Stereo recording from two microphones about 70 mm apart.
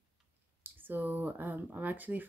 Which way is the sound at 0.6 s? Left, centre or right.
Right.